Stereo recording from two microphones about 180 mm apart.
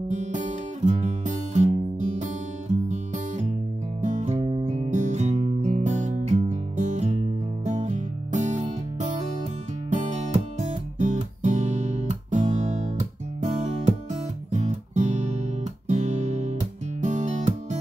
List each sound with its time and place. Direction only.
0.1 s music: 40° right (ahead or behind)
4.0 s music: 40° right (ahead or behind)